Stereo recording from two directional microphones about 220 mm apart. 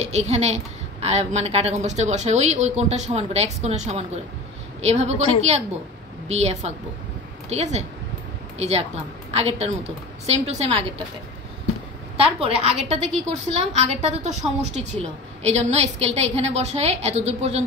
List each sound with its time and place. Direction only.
0.0 s a woman's voice: 30° right (ahead or behind)
12.2 s a woman's voice: 25° right (ahead or behind)